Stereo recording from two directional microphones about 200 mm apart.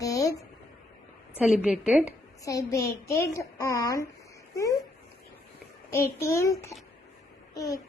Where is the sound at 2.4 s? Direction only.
15° left (ahead or behind).